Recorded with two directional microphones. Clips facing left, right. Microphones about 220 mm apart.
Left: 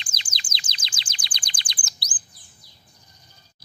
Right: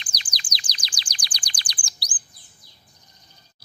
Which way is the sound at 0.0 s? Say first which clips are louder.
Even; 25° left (ahead or behind).